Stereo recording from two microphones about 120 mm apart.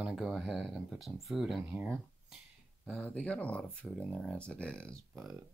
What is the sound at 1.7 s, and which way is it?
Speech, 15° right (ahead or behind).